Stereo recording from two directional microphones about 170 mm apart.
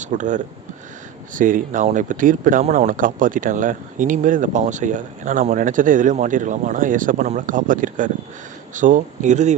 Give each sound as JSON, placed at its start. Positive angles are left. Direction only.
{"t": 0.0, "sound": "speech", "side_deg": -45}